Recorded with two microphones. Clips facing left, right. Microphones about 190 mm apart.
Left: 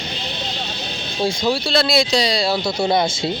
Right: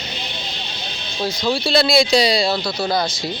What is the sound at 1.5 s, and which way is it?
Speech, centre (ahead or behind).